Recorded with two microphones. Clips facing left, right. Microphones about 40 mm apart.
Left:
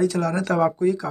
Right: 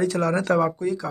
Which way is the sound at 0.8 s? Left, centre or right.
Centre.